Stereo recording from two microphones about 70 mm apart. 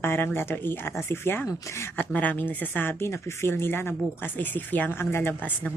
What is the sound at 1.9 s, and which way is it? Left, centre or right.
Speech, left.